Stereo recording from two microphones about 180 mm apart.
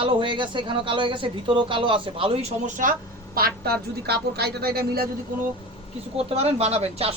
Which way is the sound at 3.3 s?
60° right (ahead or behind).